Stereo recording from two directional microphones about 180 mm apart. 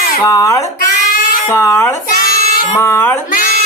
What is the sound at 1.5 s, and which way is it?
Speech, 15° left (ahead or behind).